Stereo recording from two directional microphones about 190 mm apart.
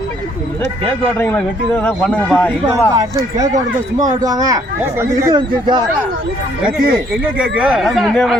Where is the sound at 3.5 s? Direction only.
40° right (ahead or behind).